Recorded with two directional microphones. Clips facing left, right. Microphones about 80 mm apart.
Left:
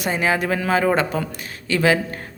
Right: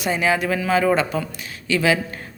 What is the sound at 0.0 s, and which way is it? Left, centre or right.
A man's voice, left.